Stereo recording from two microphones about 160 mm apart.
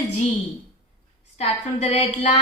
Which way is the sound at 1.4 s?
45° left (ahead or behind).